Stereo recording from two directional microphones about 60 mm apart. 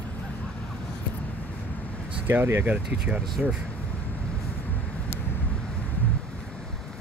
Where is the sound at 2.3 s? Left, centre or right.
Right.